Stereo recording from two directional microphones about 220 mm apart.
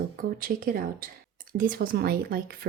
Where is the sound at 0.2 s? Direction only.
40° right (ahead or behind).